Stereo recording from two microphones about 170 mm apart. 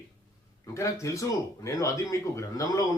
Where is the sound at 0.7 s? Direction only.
15° left (ahead or behind).